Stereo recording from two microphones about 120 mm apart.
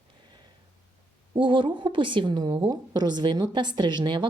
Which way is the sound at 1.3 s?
40° right (ahead or behind).